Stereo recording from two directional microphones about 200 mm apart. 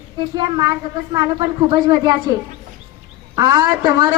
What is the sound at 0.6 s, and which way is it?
A man's voice, 20° right (ahead or behind).